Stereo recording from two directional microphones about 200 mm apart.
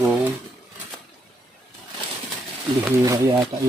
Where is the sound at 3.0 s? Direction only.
15° right (ahead or behind).